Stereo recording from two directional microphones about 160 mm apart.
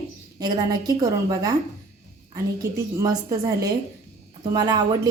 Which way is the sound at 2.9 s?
20° right (ahead or behind).